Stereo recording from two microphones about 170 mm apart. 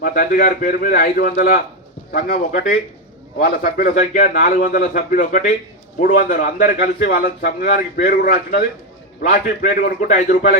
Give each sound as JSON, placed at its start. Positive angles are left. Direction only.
{"t": 0.0, "sound": "a man's voice", "side_deg": 55}